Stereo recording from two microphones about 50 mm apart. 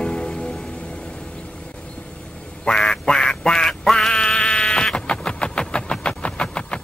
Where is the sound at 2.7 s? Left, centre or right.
Centre.